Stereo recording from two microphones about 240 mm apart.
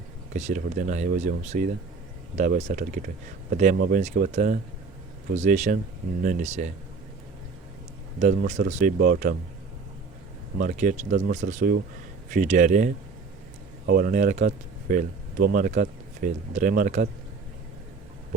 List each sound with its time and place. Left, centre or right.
0.3 s speech: right
8.2 s speech: right
10.6 s speech: right